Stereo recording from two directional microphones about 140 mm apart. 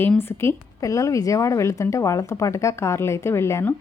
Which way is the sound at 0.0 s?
15° left (ahead or behind).